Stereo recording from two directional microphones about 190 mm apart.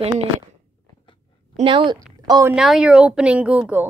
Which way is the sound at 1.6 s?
25° right (ahead or behind).